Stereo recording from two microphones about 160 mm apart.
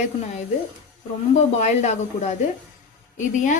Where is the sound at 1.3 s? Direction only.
45° left (ahead or behind).